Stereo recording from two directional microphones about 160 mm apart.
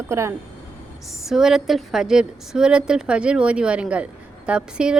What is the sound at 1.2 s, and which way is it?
A woman's voice, 5° right (ahead or behind).